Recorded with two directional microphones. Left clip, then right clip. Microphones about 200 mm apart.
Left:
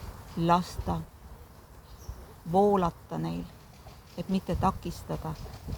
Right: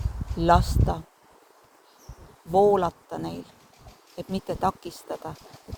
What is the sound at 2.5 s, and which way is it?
Speech, 50° right (ahead or behind).